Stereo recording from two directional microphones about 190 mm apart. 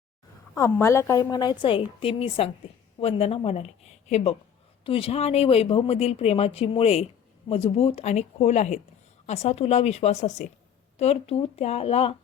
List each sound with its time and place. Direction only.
0.5 s a woman's voice: 15° left (ahead or behind); by 12.1 s 30° left (ahead or behind)